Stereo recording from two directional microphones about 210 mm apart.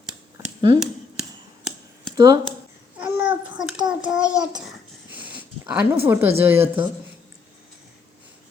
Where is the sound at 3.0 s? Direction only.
10° right (ahead or behind).